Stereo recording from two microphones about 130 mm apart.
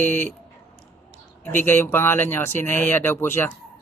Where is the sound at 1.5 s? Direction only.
15° left (ahead or behind).